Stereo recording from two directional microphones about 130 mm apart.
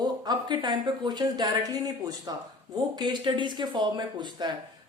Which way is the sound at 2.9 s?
35° right (ahead or behind).